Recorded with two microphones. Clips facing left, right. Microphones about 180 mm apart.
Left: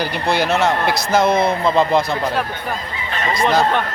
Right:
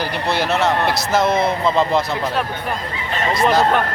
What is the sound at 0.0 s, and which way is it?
A man's voice, 5° right (ahead or behind).